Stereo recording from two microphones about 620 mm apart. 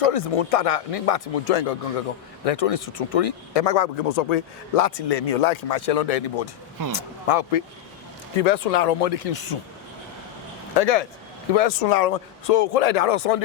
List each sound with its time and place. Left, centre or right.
0.0 s speech: left
6.8 s speech: right
7.3 s speech: left
8.4 s speech: left
10.8 s speech: left